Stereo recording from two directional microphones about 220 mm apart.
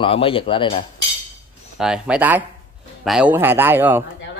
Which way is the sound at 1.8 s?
5° right (ahead or behind).